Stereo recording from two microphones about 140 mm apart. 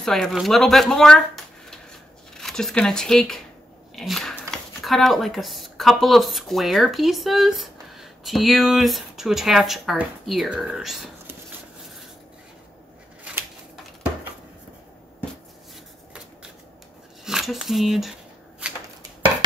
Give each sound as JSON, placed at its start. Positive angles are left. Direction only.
{"t": 0.0, "sound": "speech", "side_deg": 5}
{"t": 13.2, "sound": "a sound", "side_deg": -15}
{"t": 17.2, "sound": "speech", "side_deg": -5}